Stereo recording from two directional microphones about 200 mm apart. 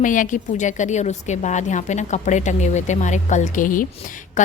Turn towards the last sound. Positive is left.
turn(degrees=40)  # may be behind; listen again after turning